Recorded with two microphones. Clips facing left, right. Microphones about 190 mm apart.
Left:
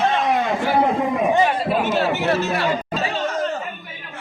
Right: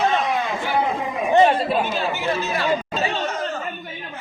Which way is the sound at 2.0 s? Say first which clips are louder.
Left 4 dB; 70° left (ahead or behind).